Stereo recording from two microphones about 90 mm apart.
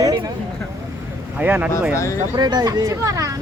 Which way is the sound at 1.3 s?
20° right (ahead or behind).